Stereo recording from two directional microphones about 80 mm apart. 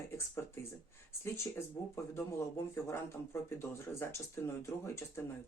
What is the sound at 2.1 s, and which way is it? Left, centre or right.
A man's voice, left.